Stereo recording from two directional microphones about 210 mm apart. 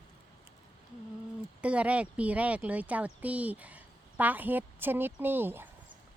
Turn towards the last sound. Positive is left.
turn(degrees=-10)  # may be behind; listen again after turning